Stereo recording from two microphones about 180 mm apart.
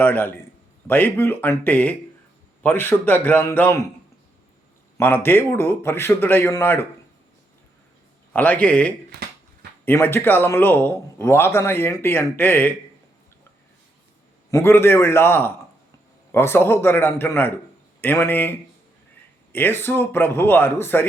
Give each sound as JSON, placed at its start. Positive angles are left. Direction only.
{"t": 0.0, "sound": "a man's voice", "side_deg": 10}
{"t": 4.9, "sound": "a man's voice", "side_deg": 10}
{"t": 8.3, "sound": "a man's voice", "side_deg": 10}
{"t": 9.1, "sound": "speech", "side_deg": -65}
{"t": 9.8, "sound": "a man's voice", "side_deg": 10}
{"t": 14.5, "sound": "a man's voice", "side_deg": 15}
{"t": 19.5, "sound": "a man's voice", "side_deg": 10}